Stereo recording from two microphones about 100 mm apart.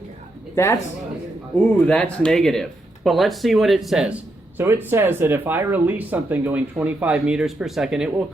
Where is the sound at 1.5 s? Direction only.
10° left (ahead or behind); by 4.2 s 5° right (ahead or behind).